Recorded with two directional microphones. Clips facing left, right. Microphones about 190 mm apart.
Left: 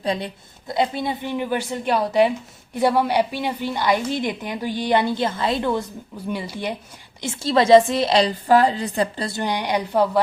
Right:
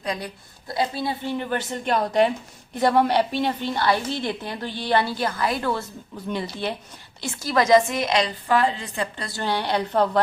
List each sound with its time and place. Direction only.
0.0 s a woman's voice: 30° left (ahead or behind)
6.2 s a woman's voice: 10° left (ahead or behind)
7.2 s a woman's voice: 25° left (ahead or behind)
9.3 s a woman's voice: 15° left (ahead or behind)